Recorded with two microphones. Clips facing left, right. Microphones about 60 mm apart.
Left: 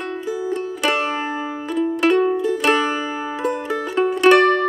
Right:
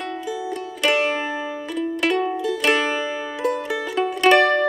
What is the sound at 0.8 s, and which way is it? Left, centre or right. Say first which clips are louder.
Music: right 1 dB; left.